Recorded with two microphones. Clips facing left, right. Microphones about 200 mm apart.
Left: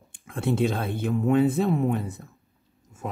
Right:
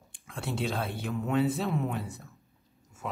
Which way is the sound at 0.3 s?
55° left (ahead or behind).